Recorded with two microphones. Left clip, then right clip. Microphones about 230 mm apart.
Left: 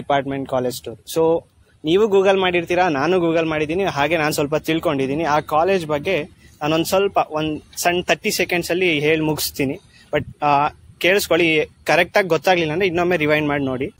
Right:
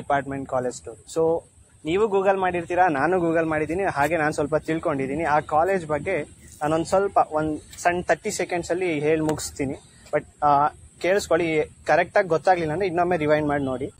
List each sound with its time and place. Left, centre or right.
0.1 s speech: left
1.1 s speech: left
1.9 s a man's voice: left